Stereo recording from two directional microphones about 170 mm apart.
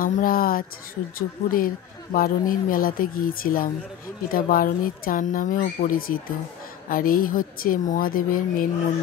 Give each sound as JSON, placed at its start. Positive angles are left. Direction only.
{"t": 0.0, "sound": "speech", "side_deg": 55}